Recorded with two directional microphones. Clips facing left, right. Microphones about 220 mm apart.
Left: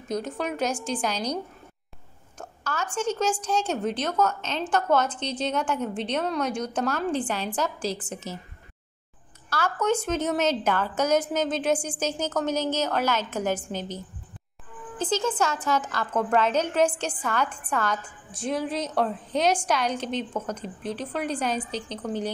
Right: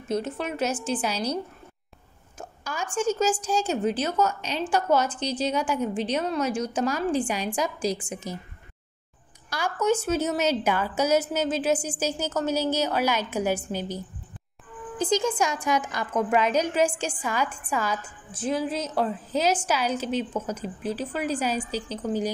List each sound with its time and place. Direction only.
0.1 s a woman's voice: centre (ahead or behind)
9.5 s a woman's voice: 10° right (ahead or behind)